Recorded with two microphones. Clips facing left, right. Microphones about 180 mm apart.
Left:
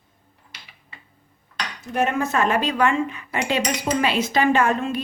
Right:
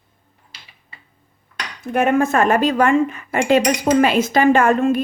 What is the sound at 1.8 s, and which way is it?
A woman's voice, 55° right (ahead or behind).